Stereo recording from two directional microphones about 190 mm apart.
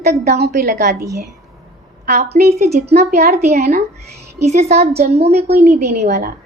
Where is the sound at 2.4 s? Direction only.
50° right (ahead or behind).